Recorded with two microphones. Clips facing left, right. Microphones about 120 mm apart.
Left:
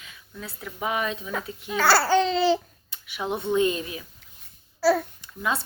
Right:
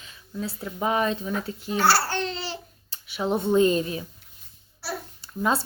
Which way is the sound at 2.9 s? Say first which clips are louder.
Right 4 dB; 35° right (ahead or behind).